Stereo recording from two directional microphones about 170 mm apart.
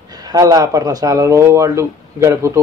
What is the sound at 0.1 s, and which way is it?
Speech, 20° right (ahead or behind).